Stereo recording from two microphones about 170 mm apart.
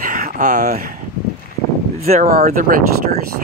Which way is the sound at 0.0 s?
50° right (ahead or behind).